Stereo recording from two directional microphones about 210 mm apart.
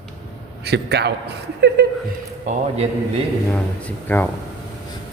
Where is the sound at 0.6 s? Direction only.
50° right (ahead or behind).